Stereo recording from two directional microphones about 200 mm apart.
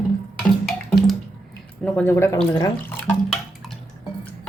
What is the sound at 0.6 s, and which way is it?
Music, centre (ahead or behind).